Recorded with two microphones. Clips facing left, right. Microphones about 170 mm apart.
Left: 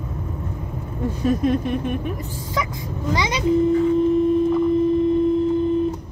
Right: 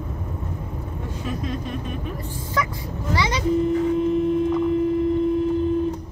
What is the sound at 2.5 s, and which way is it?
Speech, 15° left (ahead or behind).